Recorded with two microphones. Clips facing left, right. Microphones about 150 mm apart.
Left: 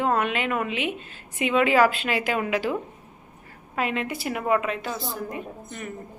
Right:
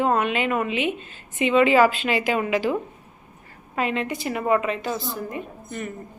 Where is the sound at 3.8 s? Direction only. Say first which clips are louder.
Right 2 dB; 5° left (ahead or behind).